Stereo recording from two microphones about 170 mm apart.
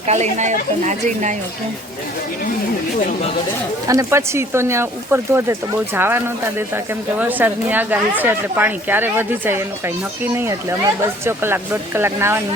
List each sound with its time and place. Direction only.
0.1 s speech: 45° right (ahead or behind)
3.8 s speech: 15° right (ahead or behind)